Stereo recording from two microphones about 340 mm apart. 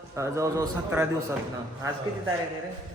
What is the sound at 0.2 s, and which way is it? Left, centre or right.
Speech, centre.